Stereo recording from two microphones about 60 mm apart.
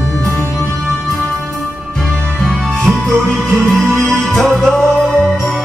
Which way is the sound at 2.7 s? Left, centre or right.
Centre.